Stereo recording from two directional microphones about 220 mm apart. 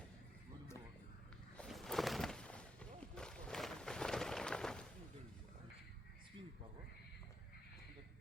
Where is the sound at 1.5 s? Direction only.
Centre (ahead or behind).